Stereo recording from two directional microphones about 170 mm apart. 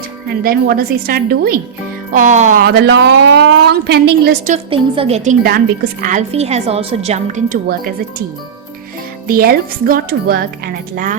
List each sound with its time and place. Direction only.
0.4 s speech: 60° right (ahead or behind)
2.1 s a woman's voice: 45° right (ahead or behind)
2.6 s a woman's voice: 75° right (ahead or behind)
4.5 s a woman's voice: 35° right (ahead or behind); by 7.9 s 55° right (ahead or behind)
9.2 s a woman's voice: 60° right (ahead or behind)